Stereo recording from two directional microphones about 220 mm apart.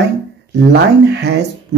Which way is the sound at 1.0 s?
50° right (ahead or behind).